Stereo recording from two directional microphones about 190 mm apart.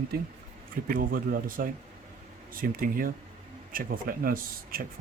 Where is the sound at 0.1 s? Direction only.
55° right (ahead or behind).